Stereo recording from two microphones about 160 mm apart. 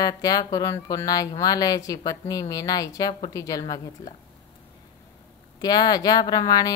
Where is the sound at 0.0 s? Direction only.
25° left (ahead or behind).